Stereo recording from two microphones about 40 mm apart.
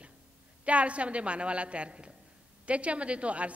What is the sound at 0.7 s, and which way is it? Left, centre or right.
A woman's voice, right.